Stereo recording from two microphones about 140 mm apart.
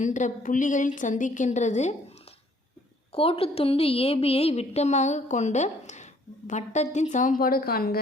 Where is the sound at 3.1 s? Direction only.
45° left (ahead or behind).